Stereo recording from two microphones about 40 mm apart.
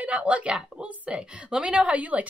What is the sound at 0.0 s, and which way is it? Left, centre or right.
A woman's voice, right.